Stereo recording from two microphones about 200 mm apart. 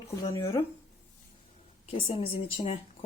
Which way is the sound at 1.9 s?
30° left (ahead or behind).